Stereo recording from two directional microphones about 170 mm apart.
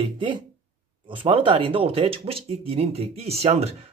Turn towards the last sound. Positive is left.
turn(degrees=-35)  # may be behind; listen again after turning